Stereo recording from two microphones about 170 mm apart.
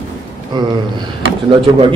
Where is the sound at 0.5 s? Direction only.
25° right (ahead or behind).